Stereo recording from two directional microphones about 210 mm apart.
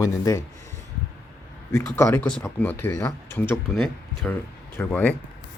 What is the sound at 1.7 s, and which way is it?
Speech, 15° left (ahead or behind).